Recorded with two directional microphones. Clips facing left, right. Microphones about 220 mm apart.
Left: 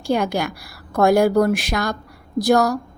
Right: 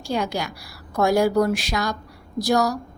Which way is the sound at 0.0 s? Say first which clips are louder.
Left 5 dB; 55° left (ahead or behind).